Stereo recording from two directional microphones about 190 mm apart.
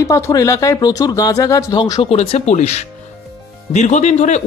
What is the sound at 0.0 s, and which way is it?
Speech, 15° left (ahead or behind).